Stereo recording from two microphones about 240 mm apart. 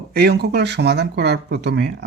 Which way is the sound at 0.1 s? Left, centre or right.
Right.